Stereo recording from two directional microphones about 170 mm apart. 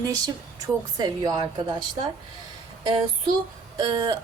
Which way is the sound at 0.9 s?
20° right (ahead or behind).